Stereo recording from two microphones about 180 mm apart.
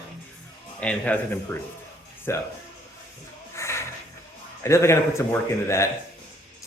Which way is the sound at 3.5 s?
15° left (ahead or behind).